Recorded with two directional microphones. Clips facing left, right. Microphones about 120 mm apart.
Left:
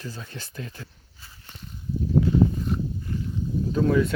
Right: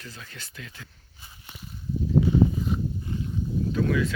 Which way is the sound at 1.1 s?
15° right (ahead or behind).